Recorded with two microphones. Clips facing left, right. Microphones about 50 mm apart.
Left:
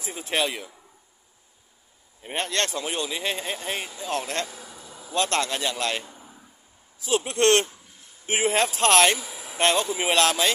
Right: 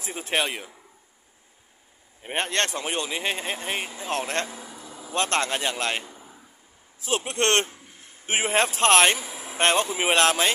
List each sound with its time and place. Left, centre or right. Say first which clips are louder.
0.0 s speech: even; right
2.2 s speech: right 1 dB; right
4.5 s a sound: right 2 dB; centre
5.3 s speech: right 1 dB; right
6.0 s a sound: right 1 dB; centre
7.1 s speech: left 3 dB; right